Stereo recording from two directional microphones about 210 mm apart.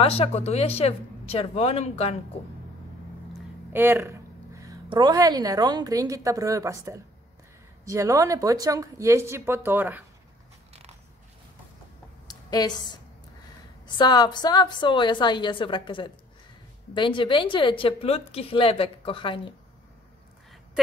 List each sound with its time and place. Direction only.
0.0 s speech: 30° left (ahead or behind)
3.7 s a woman's voice: 10° right (ahead or behind)
10.7 s a sound: 30° right (ahead or behind)
12.3 s speech: 20° left (ahead or behind)